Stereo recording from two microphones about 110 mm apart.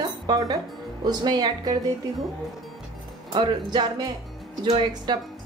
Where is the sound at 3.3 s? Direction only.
45° right (ahead or behind).